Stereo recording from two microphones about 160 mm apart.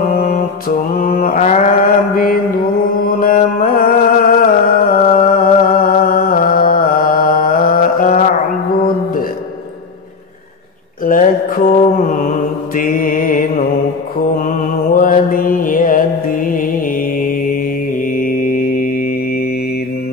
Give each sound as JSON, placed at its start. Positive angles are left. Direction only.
{"t": 0.2, "sound": "mantra", "side_deg": 60}
{"t": 3.0, "sound": "music", "side_deg": 65}
{"t": 11.1, "sound": "mantra", "side_deg": 60}
{"t": 18.1, "sound": "music", "side_deg": 60}